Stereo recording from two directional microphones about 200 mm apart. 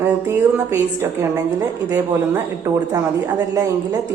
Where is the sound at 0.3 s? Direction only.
10° right (ahead or behind).